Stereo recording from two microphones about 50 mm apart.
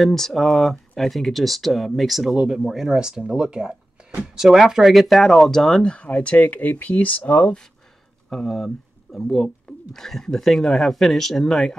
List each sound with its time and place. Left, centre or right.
0.0 s speech: centre; by 7.5 s left
8.3 s speech: centre